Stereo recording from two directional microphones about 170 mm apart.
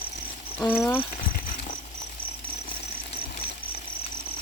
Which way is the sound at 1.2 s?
55° left (ahead or behind).